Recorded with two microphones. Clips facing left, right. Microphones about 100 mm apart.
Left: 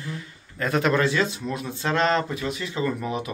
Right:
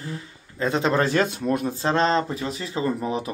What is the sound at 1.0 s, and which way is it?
Speech, 45° right (ahead or behind).